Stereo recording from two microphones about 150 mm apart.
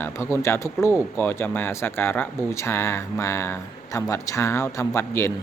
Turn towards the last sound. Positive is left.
turn(degrees=20)  # may be behind; listen again after turning